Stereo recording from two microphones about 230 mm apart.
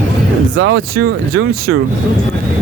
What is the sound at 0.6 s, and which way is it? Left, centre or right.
Speech, right.